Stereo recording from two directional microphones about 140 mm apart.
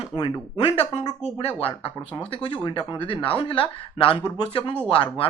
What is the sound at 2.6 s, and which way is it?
Speech, 35° left (ahead or behind).